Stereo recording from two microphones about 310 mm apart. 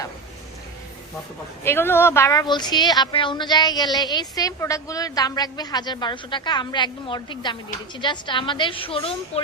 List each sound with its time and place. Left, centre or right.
1.6 s speech: centre